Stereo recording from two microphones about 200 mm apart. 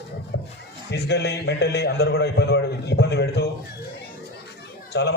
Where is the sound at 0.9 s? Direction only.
55° left (ahead or behind).